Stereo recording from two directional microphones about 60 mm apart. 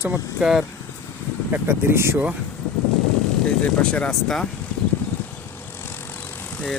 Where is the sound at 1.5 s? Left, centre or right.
Right.